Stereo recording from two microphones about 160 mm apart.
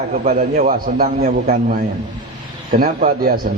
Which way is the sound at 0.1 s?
50° right (ahead or behind).